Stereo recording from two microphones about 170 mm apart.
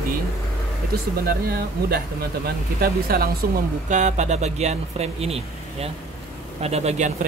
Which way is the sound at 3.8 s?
45° right (ahead or behind).